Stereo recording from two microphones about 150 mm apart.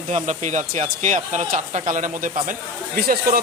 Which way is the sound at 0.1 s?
55° right (ahead or behind).